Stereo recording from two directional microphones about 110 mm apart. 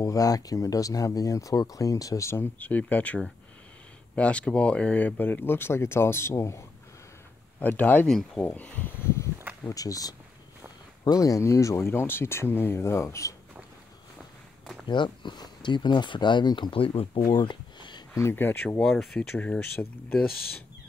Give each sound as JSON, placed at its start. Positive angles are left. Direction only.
{"t": 0.0, "sound": "speech", "side_deg": 30}
{"t": 7.6, "sound": "speech", "side_deg": 15}
{"t": 14.9, "sound": "speech", "side_deg": 45}
{"t": 18.1, "sound": "speech", "side_deg": 20}
{"t": 18.8, "sound": "speech", "side_deg": 5}